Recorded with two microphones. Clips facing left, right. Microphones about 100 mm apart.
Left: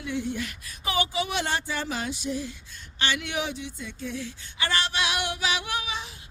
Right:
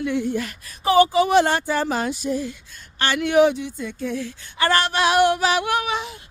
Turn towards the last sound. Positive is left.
turn(degrees=-65)  # may be behind; listen again after turning